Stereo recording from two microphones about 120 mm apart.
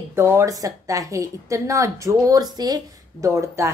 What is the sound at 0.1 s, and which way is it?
A woman's voice, 20° right (ahead or behind).